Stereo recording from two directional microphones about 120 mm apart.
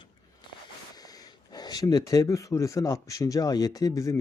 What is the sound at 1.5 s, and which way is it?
Speech, 35° left (ahead or behind).